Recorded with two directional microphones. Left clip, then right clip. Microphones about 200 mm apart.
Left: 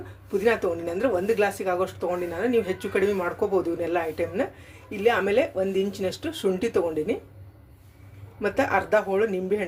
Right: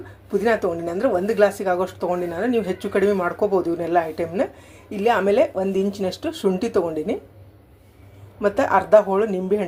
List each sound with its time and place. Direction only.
0.3 s speech: 10° right (ahead or behind)
8.4 s speech: 10° right (ahead or behind)